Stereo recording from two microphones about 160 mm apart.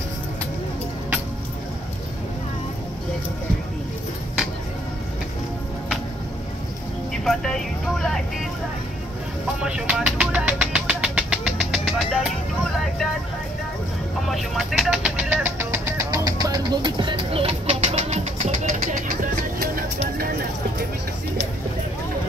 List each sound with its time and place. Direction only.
7.2 s vehicle: centre (ahead or behind)
9.6 s music: 5° right (ahead or behind)
14.2 s vehicle: centre (ahead or behind); by 19.1 s 50° right (ahead or behind)